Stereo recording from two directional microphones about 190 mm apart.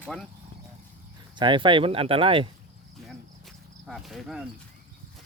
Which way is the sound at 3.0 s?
Centre (ahead or behind).